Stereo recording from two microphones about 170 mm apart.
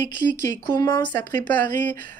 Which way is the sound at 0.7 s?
20° left (ahead or behind).